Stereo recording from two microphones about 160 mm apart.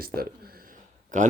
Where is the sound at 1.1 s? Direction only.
50° right (ahead or behind).